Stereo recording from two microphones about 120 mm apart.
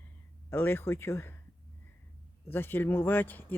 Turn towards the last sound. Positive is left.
turn(degrees=15)  # may be behind; listen again after turning